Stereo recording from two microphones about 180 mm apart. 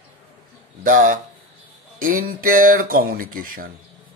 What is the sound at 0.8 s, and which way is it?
A man's voice, 45° right (ahead or behind).